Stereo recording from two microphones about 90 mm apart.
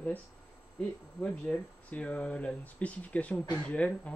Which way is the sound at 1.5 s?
5° left (ahead or behind).